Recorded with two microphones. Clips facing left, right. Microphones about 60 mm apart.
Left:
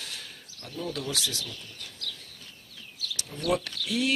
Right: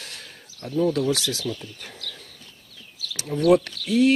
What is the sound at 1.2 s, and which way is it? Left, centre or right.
Speech, right.